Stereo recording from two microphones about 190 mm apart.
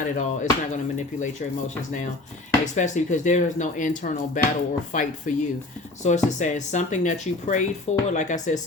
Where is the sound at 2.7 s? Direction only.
40° left (ahead or behind).